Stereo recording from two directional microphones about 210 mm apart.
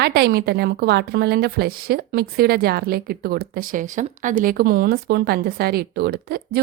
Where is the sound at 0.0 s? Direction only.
50° right (ahead or behind).